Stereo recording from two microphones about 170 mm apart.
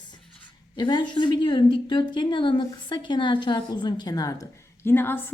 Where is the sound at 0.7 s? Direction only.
25° left (ahead or behind).